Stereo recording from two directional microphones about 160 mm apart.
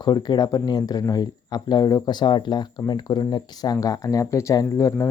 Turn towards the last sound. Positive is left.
turn(degrees=20)  # may be behind; listen again after turning